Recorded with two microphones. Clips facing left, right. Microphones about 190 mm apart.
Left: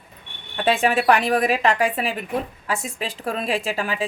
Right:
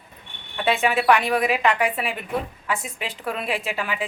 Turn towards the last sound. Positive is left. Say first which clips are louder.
# left 3 dB
turn(degrees=35)  # may be behind; listen again after turning